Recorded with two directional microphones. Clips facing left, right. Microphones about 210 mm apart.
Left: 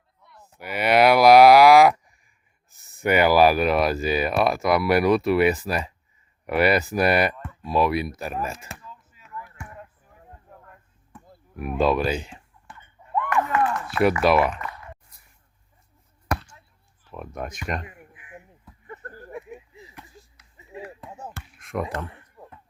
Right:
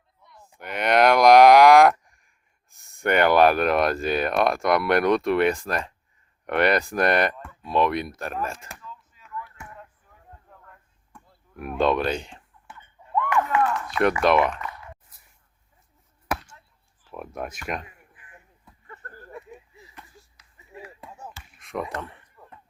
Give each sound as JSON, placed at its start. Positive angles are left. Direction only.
{"t": 0.3, "sound": "cattle", "side_deg": 5}
{"t": 2.7, "sound": "speech", "side_deg": 5}
{"t": 9.6, "sound": "a sound", "side_deg": 15}
{"t": 11.1, "sound": "a sound", "side_deg": 5}
{"t": 11.5, "sound": "speech", "side_deg": 5}
{"t": 13.9, "sound": "speech", "side_deg": 5}
{"t": 16.3, "sound": "basketball bounce", "side_deg": -5}
{"t": 17.0, "sound": "speech", "side_deg": -5}
{"t": 17.8, "sound": "crow", "side_deg": 15}
{"t": 18.9, "sound": "a sound", "side_deg": 15}
{"t": 21.6, "sound": "speech", "side_deg": 0}